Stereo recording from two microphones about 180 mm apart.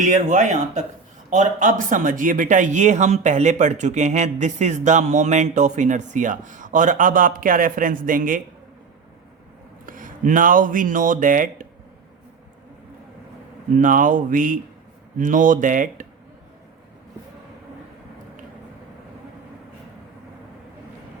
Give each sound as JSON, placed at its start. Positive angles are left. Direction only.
{"t": 0.0, "sound": "a man's voice", "side_deg": -45}
{"t": 9.8, "sound": "speech", "side_deg": -50}
{"t": 13.7, "sound": "a man's voice", "side_deg": -45}